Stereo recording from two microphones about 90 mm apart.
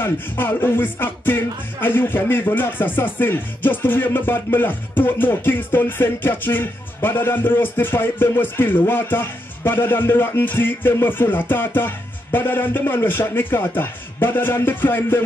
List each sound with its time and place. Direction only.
0.0 s music: 25° left (ahead or behind)